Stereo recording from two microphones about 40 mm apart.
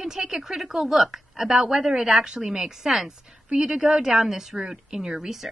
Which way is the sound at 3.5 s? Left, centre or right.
Right.